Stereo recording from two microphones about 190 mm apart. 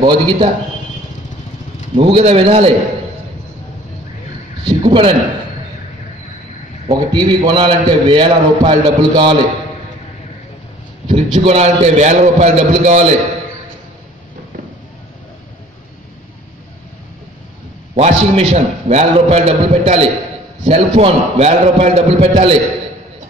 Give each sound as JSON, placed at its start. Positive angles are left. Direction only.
{"t": 0.0, "sound": "a man's voice", "side_deg": -25}
{"t": 2.0, "sound": "a man's voice", "side_deg": -30}
{"t": 4.6, "sound": "a man's voice", "side_deg": -30}
{"t": 6.9, "sound": "a man's voice", "side_deg": -25}
{"t": 11.1, "sound": "a man's voice", "side_deg": -30}
{"t": 17.9, "sound": "a man's voice", "side_deg": -35}